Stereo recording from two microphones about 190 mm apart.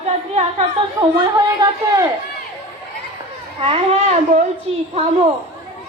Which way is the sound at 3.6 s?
30° right (ahead or behind).